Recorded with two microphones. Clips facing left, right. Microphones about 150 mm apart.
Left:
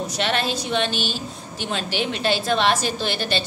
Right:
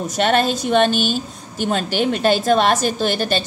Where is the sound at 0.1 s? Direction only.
45° right (ahead or behind).